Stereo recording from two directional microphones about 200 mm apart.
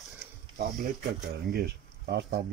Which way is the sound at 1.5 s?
55° right (ahead or behind).